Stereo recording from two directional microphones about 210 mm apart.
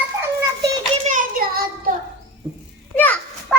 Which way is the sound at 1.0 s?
40° right (ahead or behind).